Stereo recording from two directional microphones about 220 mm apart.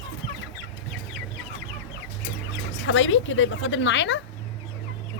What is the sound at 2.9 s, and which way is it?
Speech, 60° left (ahead or behind).